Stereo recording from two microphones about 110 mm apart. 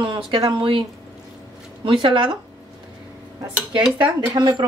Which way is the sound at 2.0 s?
50° right (ahead or behind).